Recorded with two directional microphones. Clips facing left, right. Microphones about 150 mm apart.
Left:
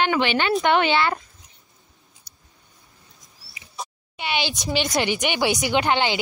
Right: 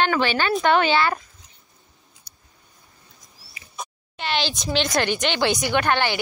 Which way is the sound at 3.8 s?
10° left (ahead or behind).